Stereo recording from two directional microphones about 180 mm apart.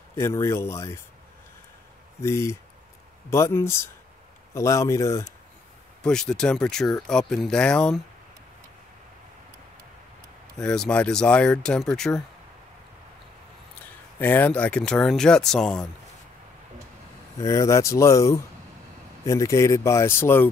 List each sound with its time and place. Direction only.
0.1 s speech: 15° left (ahead or behind)
2.2 s speech: 15° left (ahead or behind)
6.0 s speech: 5° left (ahead or behind)
10.6 s speech: 5° left (ahead or behind)
14.2 s speech: 10° left (ahead or behind)
17.4 s speech: 15° left (ahead or behind)